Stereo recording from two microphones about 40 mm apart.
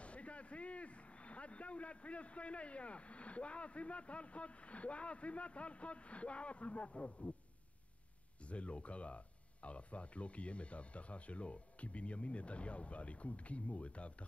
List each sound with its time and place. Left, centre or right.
0.0 s speech: left
8.5 s speech: left